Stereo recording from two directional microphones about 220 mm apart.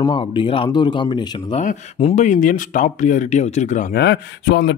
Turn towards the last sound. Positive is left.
turn(degrees=50)  # may be behind; listen again after turning